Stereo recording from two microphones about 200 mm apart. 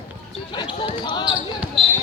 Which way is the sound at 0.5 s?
25° left (ahead or behind).